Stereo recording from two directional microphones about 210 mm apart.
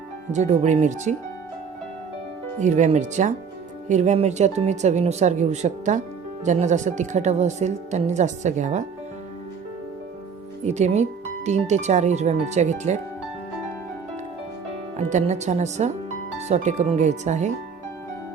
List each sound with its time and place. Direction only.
0.3 s speech: 35° right (ahead or behind)
2.6 s speech: 35° right (ahead or behind)
10.6 s speech: 30° right (ahead or behind)
14.9 s speech: 30° right (ahead or behind)